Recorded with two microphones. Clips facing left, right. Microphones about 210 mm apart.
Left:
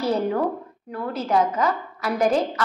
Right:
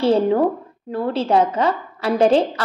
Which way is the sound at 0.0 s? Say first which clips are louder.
Right 6 dB; 30° right (ahead or behind).